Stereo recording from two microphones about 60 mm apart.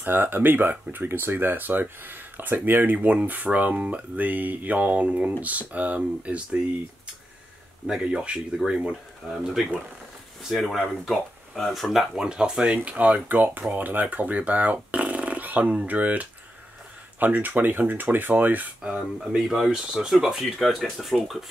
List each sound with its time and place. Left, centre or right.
0.0 s speech: right
7.8 s speech: centre
18.9 s speech: centre